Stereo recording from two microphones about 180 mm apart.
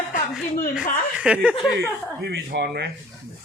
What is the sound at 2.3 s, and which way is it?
Speech, 65° right (ahead or behind).